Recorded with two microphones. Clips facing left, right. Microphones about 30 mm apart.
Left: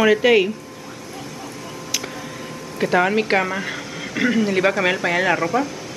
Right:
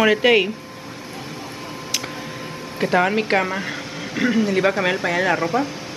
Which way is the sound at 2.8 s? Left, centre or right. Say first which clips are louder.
Left 1 dB; centre.